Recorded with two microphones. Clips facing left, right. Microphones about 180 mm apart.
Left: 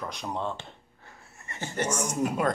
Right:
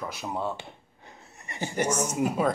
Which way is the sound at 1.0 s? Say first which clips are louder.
Right 2 dB; 20° right (ahead or behind).